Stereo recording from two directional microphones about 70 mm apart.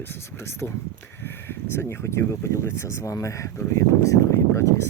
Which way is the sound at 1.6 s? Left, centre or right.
Left.